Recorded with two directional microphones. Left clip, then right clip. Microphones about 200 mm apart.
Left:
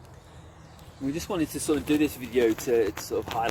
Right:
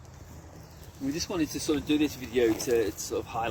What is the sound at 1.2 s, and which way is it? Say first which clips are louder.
Speech: left 1 dB; 30° left (ahead or behind).